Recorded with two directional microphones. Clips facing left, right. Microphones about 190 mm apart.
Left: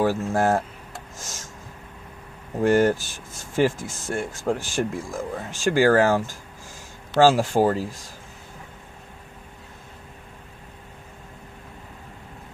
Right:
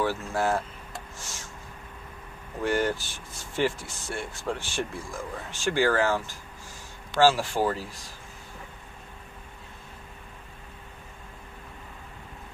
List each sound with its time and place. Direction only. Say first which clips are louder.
0.0 s speech: left 5 dB; 45° left (ahead or behind)
1.1 s a sound: left 3 dB; 45° left (ahead or behind)
2.6 s speech: left 8 dB; 45° left (ahead or behind)